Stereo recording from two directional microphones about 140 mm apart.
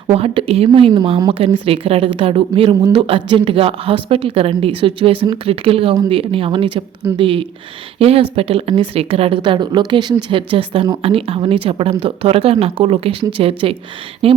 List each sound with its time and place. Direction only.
0.1 s speech: 45° right (ahead or behind)